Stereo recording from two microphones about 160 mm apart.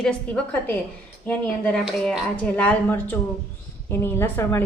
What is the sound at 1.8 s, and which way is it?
Speech, 5° right (ahead or behind).